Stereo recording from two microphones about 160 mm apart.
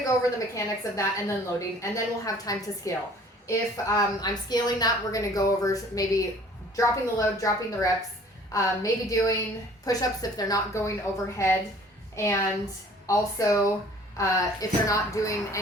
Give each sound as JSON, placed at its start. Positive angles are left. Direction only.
{"t": 0.0, "sound": "a woman's voice", "side_deg": 20}